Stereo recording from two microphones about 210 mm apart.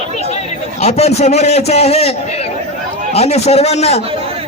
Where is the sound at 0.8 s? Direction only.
30° left (ahead or behind).